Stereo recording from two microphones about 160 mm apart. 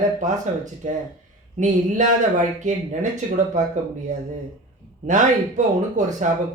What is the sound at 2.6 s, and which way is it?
Speech, 50° right (ahead or behind).